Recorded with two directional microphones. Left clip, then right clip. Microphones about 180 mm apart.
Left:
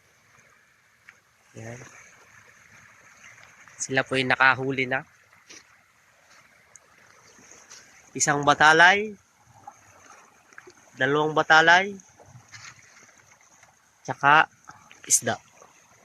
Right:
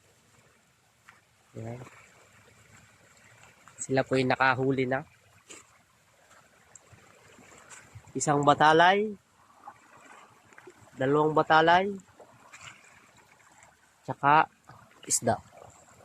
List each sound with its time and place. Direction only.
3.8 s speech: 10° right (ahead or behind)
8.1 s speech: 5° right (ahead or behind)
10.9 s speech: centre (ahead or behind)
14.0 s speech: 20° left (ahead or behind)
14.3 s speech: 5° left (ahead or behind)